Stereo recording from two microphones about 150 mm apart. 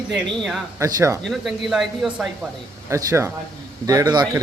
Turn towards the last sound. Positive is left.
turn(degrees=-25)  # may be behind; listen again after turning